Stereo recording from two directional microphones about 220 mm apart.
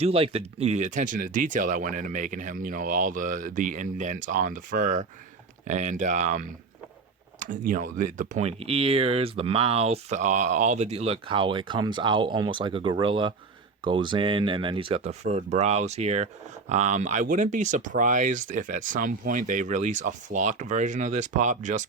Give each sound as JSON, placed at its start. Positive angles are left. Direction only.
{"t": 0.0, "sound": "speech", "side_deg": -25}